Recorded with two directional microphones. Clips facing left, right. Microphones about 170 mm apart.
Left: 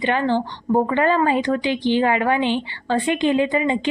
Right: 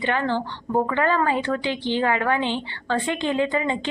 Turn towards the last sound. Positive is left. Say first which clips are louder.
# left 4 dB
turn(degrees=15)  # may be behind; listen again after turning